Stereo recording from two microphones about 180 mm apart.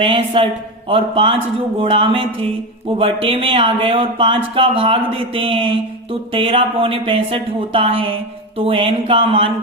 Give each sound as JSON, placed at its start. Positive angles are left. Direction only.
{"t": 0.0, "sound": "speech", "side_deg": -30}